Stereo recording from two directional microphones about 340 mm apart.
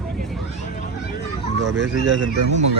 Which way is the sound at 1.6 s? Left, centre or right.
Right.